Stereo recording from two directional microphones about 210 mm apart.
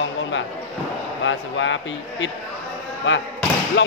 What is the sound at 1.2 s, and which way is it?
A man's voice, 65° left (ahead or behind).